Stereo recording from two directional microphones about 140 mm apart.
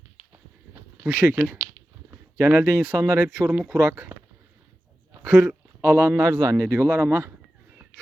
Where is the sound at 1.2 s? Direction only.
15° right (ahead or behind).